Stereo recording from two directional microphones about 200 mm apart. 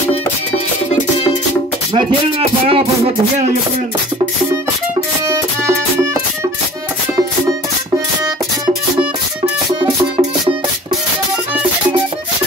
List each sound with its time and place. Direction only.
2.7 s music: 30° right (ahead or behind)